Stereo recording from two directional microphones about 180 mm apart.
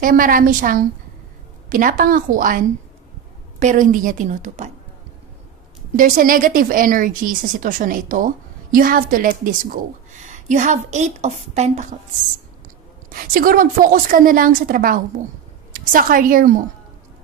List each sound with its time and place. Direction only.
0.0 s speech: 50° right (ahead or behind)
5.9 s a woman's voice: 50° right (ahead or behind)
13.1 s a woman's voice: 50° right (ahead or behind)